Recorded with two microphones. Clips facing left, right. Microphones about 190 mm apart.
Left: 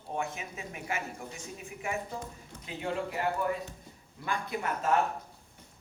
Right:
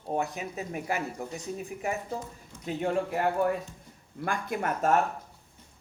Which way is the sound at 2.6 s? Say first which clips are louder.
Right 6 dB; 50° right (ahead or behind).